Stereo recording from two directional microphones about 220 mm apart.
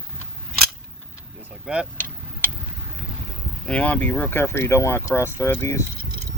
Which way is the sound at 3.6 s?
5° left (ahead or behind).